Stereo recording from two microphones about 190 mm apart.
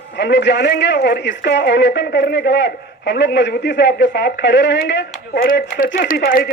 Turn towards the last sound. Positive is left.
turn(degrees=55)  # may be behind; listen again after turning